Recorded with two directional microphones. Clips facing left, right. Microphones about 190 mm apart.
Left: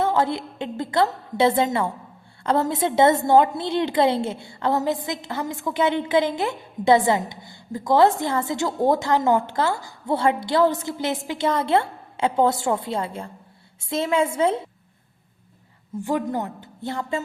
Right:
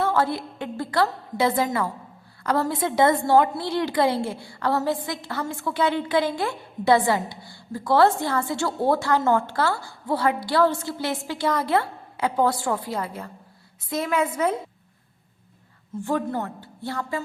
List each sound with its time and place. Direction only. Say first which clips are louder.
0.0 s a woman's voice: left 1 dB; 20° left (ahead or behind)
16.0 s speech: left 1 dB; 15° left (ahead or behind)